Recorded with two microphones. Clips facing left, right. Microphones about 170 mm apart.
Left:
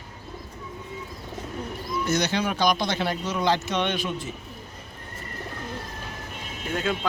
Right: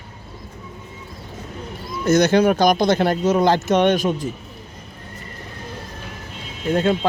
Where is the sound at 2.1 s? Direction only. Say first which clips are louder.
Right 11 dB; 45° right (ahead or behind).